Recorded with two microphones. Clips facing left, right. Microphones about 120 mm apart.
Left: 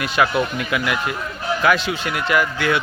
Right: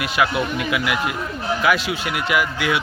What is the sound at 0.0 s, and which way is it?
A man's voice, 5° right (ahead or behind).